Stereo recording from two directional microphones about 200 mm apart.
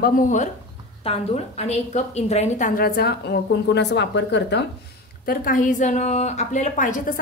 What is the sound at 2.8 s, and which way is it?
A woman's voice, 50° left (ahead or behind).